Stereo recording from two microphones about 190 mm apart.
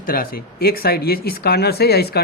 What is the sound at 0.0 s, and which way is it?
Speech, 50° left (ahead or behind).